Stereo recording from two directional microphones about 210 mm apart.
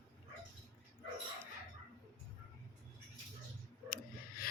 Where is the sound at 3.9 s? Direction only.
45° left (ahead or behind).